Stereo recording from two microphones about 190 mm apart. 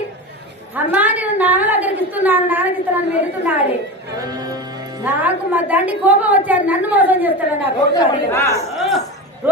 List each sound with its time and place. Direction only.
0.9 s a woman's voice: 10° right (ahead or behind)
4.2 s music: 20° right (ahead or behind)
5.0 s a woman's voice: 10° right (ahead or behind)
7.9 s speech: 15° left (ahead or behind)
8.7 s a sound: centre (ahead or behind)